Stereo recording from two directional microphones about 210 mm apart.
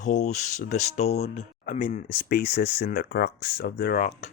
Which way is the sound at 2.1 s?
50° left (ahead or behind).